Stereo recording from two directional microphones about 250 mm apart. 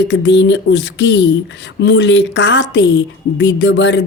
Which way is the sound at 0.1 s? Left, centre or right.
Left.